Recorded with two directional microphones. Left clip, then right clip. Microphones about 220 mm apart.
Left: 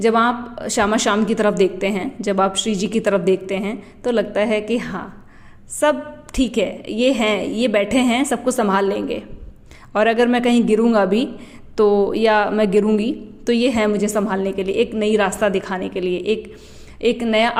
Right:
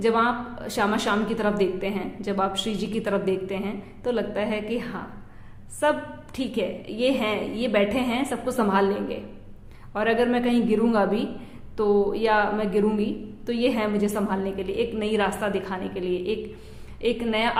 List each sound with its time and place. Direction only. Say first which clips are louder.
0.0 s a woman's voice: left 6 dB; 35° left (ahead or behind)